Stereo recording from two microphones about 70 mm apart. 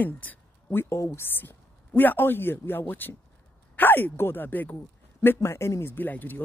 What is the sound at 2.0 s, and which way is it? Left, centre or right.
A man's voice, left.